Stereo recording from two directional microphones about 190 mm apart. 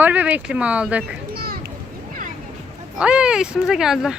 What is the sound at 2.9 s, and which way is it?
Speech, 5° right (ahead or behind).